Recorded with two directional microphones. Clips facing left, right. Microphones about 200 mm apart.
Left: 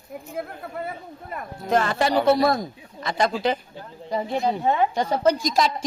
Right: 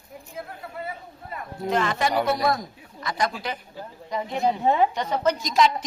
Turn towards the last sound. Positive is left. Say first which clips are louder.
# left 1 dB
turn(degrees=35)  # may be behind; listen again after turning